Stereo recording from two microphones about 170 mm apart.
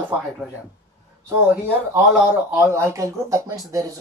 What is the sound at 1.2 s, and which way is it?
Speech, 15° right (ahead or behind).